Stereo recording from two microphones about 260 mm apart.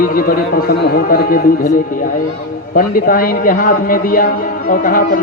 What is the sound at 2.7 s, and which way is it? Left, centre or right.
A man's voice, left.